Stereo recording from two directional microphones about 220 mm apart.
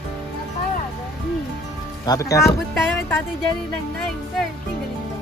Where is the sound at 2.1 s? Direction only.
15° left (ahead or behind).